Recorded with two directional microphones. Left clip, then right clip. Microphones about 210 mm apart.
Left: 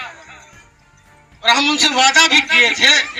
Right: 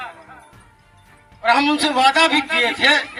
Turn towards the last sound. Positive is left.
turn(degrees=35)  # may be behind; listen again after turning